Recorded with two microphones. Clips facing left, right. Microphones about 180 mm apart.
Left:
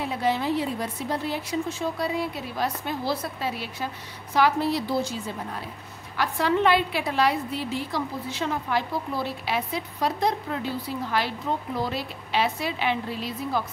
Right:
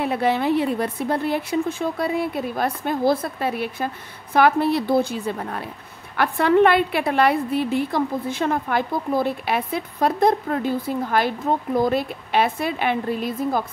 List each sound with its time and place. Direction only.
0.0 s a woman's voice: 60° right (ahead or behind)